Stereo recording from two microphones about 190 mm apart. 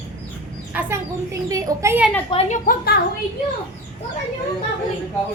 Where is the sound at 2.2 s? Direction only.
30° left (ahead or behind).